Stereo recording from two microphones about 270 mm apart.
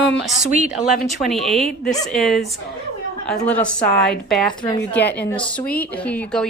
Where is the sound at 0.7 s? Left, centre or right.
Centre.